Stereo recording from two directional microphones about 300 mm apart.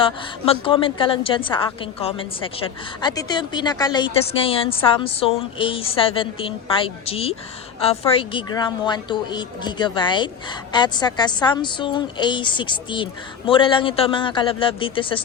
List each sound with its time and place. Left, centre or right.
0.0 s a woman's voice: centre